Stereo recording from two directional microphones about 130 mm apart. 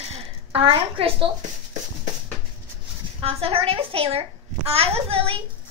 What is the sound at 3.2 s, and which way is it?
A child's voice, 45° right (ahead or behind).